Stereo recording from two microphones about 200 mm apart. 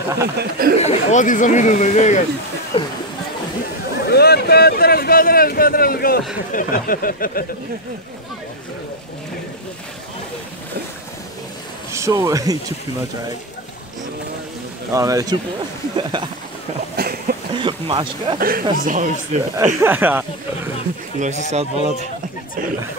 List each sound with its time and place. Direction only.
0.4 s speech: 45° right (ahead or behind)
0.7 s speech: 35° left (ahead or behind)
4.0 s speech: 55° left (ahead or behind)
11.9 s speech: 15° right (ahead or behind)
14.9 s speech: 15° right (ahead or behind)
16.9 s a sound: 50° right (ahead or behind)
17.6 s speech: 25° right (ahead or behind)
18.4 s speech: 45° right (ahead or behind)
19.5 s speech: 15° right (ahead or behind)
21.2 s speech: 35° right (ahead or behind)